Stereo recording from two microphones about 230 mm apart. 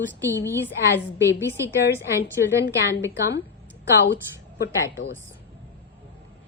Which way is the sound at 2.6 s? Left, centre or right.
Left.